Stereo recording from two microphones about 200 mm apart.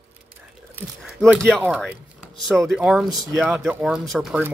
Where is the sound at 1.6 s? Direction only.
5° right (ahead or behind).